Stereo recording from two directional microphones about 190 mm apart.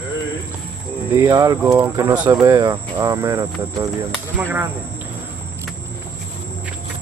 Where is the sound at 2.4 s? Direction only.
20° right (ahead or behind).